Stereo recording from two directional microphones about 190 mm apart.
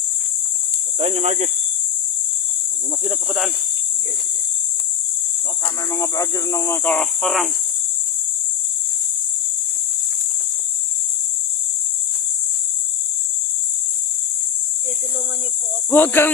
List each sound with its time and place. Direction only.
0.9 s speech: 35° right (ahead or behind)
3.0 s cricket: 5° right (ahead or behind)
5.9 s speech: 15° left (ahead or behind); by 7.5 s centre (ahead or behind)
15.9 s speech: 10° left (ahead or behind)